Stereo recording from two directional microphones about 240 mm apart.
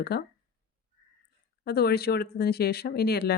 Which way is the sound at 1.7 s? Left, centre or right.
Left.